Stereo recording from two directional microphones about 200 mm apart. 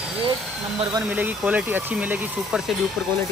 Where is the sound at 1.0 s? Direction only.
10° right (ahead or behind).